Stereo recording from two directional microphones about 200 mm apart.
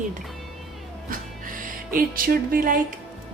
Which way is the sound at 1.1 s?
45° right (ahead or behind).